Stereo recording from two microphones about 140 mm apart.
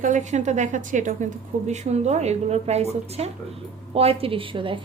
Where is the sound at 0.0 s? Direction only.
60° right (ahead or behind).